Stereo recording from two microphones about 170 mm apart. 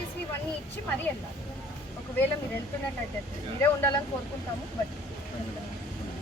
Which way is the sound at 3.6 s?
10° left (ahead or behind).